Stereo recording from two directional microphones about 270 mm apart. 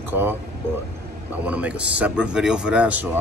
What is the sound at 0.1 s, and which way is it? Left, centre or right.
Speech, centre.